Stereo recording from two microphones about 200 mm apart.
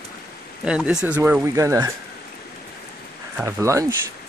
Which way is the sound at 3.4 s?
15° right (ahead or behind).